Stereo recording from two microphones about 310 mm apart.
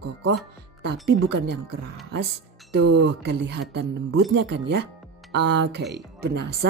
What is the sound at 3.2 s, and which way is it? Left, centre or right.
A woman's voice, right.